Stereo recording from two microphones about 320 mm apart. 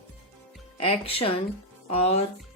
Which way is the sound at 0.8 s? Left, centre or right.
Centre.